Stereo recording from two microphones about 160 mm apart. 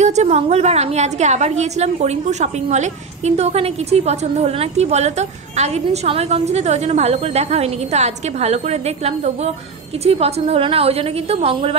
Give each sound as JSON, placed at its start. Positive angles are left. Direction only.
{"t": 0.0, "sound": "a woman's voice", "side_deg": -45}